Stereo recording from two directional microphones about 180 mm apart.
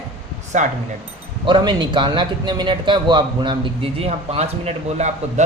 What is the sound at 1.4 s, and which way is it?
A man's voice, 25° right (ahead or behind).